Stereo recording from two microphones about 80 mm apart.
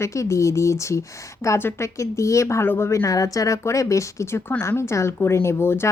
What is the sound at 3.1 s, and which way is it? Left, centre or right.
Speech, left.